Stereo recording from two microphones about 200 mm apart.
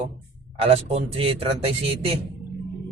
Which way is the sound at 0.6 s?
30° right (ahead or behind).